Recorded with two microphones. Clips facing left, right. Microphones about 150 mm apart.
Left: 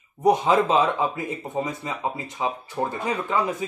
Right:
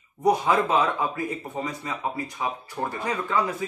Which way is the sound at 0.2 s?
20° left (ahead or behind).